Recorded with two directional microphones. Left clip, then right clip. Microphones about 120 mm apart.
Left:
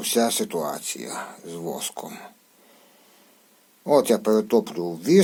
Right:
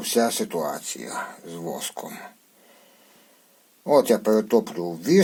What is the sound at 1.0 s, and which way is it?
Speech, 15° left (ahead or behind).